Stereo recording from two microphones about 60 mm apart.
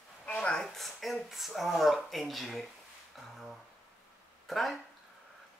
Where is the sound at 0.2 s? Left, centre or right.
Centre.